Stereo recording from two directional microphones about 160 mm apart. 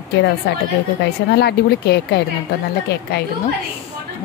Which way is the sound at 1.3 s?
90° left.